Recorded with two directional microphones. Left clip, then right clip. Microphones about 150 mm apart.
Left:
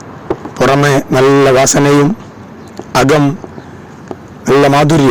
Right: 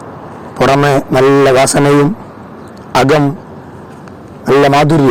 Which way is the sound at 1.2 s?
5° left (ahead or behind).